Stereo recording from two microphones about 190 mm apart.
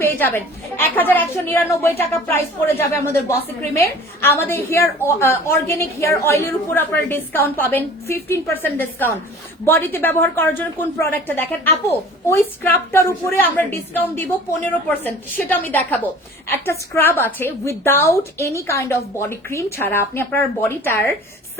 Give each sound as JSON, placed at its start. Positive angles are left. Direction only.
{"t": 0.0, "sound": "a woman's voice", "side_deg": 10}